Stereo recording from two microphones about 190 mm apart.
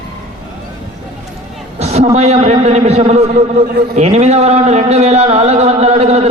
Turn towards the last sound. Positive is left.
turn(degrees=-35)  # may be behind; listen again after turning